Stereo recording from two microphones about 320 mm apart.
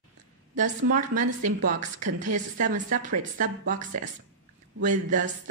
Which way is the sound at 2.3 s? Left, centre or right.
Right.